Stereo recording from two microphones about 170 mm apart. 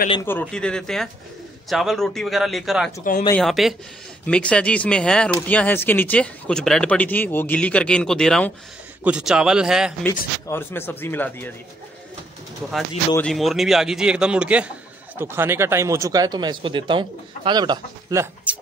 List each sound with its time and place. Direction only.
0.2 s a man's voice: 10° left (ahead or behind); by 9.9 s 5° right (ahead or behind)
10.0 s speech: 15° left (ahead or behind)
13.1 s a man's voice: 5° left (ahead or behind); by 18.6 s 10° right (ahead or behind)